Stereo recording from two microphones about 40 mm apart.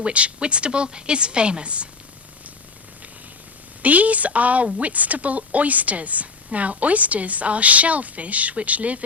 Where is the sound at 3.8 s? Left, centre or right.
Right.